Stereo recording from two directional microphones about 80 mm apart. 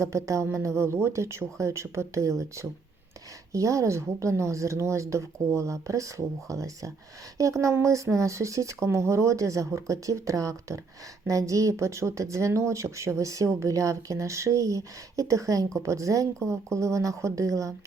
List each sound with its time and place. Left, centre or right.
0.0 s speech: right